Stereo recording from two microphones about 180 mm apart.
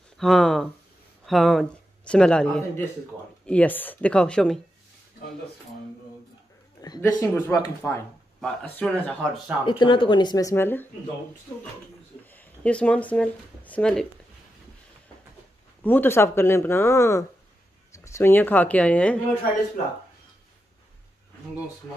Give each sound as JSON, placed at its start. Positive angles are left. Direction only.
{"t": 0.2, "sound": "speech", "side_deg": 0}
{"t": 6.8, "sound": "speech", "side_deg": 20}
{"t": 8.4, "sound": "speech", "side_deg": 5}
{"t": 9.7, "sound": "speech", "side_deg": 25}
{"t": 12.3, "sound": "speech", "side_deg": 10}
{"t": 15.8, "sound": "speech", "side_deg": 10}